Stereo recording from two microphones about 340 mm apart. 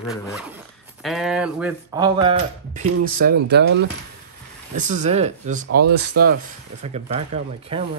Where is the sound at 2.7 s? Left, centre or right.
Right.